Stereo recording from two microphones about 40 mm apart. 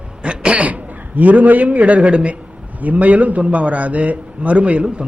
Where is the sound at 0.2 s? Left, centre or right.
Right.